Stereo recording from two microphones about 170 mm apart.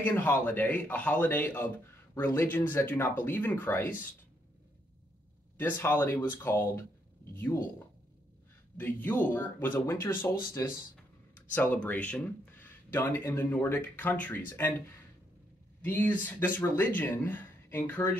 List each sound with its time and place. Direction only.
0.0 s speech: 10° left (ahead or behind)
5.6 s speech: 10° left (ahead or behind)
8.7 s speech: 10° left (ahead or behind)
15.8 s speech: 10° left (ahead or behind)